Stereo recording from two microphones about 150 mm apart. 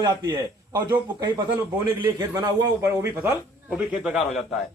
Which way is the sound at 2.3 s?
25° right (ahead or behind).